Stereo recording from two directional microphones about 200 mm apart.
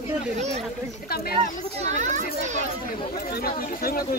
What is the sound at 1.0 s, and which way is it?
Speech, 50° left (ahead or behind).